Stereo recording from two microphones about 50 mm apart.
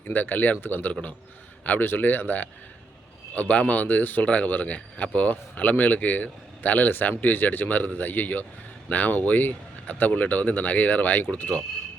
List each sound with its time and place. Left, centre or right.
0.1 s speech: left